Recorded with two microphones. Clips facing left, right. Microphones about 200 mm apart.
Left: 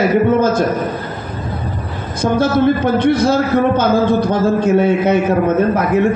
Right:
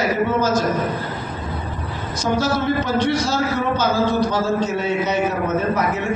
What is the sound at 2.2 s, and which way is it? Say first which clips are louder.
A man's voice: left 7 dB; 55° left (ahead or behind).